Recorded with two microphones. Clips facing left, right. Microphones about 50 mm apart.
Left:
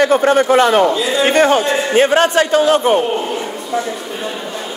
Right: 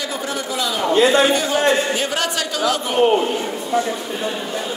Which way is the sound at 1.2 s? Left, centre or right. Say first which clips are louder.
Left 5 dB; left.